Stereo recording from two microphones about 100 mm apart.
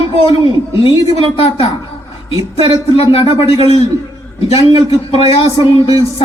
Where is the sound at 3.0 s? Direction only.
75° left (ahead or behind).